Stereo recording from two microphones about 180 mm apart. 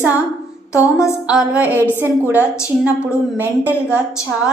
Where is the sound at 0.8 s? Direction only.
15° left (ahead or behind).